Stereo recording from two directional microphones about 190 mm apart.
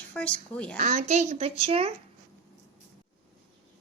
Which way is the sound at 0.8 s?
40° right (ahead or behind).